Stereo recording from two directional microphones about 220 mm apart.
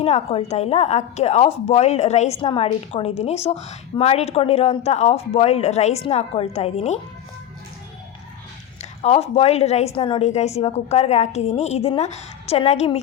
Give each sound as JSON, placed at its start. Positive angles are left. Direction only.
{"t": 0.0, "sound": "a woman's voice", "side_deg": 25}
{"t": 8.8, "sound": "a woman's voice", "side_deg": 30}